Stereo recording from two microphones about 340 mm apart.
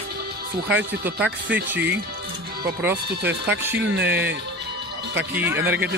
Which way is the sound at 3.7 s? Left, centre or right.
Right.